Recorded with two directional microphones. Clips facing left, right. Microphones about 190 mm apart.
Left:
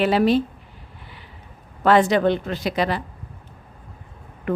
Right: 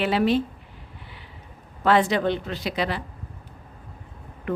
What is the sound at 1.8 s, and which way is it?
A woman's voice, 50° left (ahead or behind).